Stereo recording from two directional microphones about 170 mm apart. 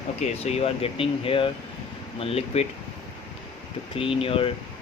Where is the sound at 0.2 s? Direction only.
40° left (ahead or behind).